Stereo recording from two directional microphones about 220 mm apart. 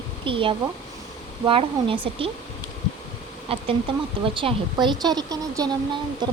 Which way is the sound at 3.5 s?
25° right (ahead or behind).